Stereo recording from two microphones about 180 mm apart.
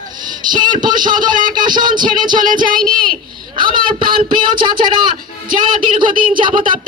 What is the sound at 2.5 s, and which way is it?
Speech, 50° right (ahead or behind).